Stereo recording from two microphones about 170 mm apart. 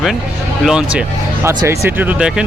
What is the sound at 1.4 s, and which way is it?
Speech, 15° right (ahead or behind).